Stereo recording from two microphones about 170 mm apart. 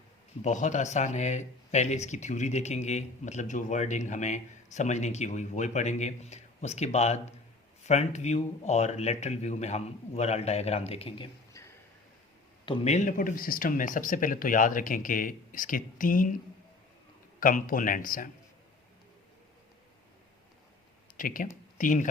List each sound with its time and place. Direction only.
0.4 s speech: 45° left (ahead or behind)
12.6 s speech: 35° left (ahead or behind); by 16.4 s 55° left (ahead or behind)
17.4 s speech: 55° left (ahead or behind)
21.2 s speech: 55° left (ahead or behind)